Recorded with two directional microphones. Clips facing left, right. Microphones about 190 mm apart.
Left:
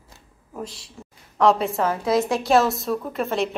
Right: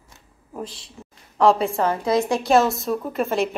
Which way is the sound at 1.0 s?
10° right (ahead or behind).